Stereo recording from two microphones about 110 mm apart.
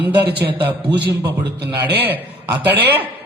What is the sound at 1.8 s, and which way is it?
Speech, 15° right (ahead or behind).